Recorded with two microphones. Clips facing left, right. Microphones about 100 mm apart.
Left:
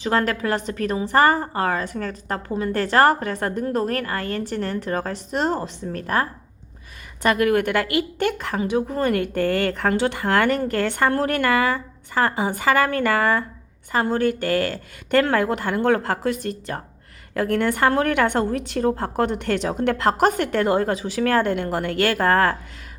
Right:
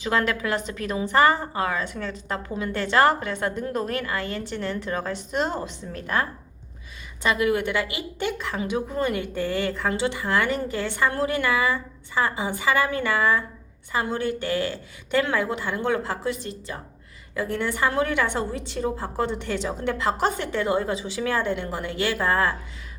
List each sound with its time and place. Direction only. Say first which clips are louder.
0.0 s a woman's voice: left 3 dB; 35° left (ahead or behind); by 8.6 s 55° left (ahead or behind)
8.7 s a woman's voice: left 4 dB; 45° left (ahead or behind)